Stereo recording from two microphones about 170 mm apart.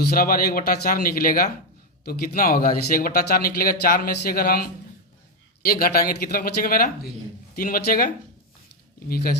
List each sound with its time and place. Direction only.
0.1 s speech: 60° left (ahead or behind)